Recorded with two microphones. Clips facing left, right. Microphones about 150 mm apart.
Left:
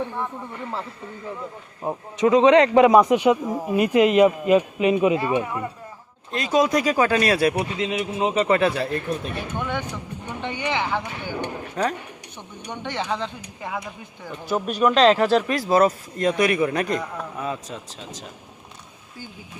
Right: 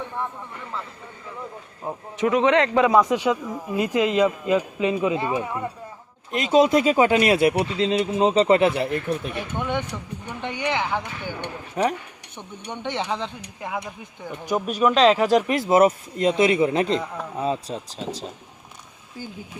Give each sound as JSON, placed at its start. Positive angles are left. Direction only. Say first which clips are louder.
{"t": 1.8, "sound": "a man's voice", "louder": "left 3 dB", "side_deg": 20}
{"t": 6.3, "sound": "speech", "louder": "right 3 dB", "side_deg": -25}
{"t": 14.4, "sound": "speech", "louder": "even", "side_deg": -10}